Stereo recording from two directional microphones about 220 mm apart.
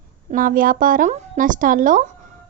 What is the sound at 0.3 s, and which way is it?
A woman's voice, 40° right (ahead or behind).